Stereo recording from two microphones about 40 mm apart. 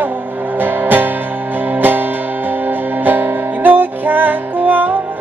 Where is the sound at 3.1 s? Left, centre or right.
Right.